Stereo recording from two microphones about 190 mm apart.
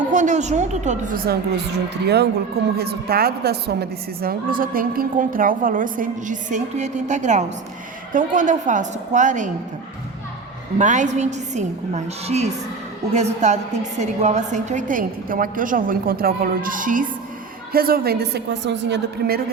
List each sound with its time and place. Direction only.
0.1 s a woman's voice: 40° right (ahead or behind)
10.8 s a woman's voice: 40° right (ahead or behind); by 19.4 s 60° right (ahead or behind)